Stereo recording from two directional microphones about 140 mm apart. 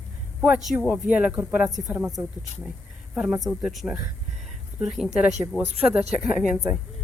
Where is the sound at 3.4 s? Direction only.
Centre (ahead or behind).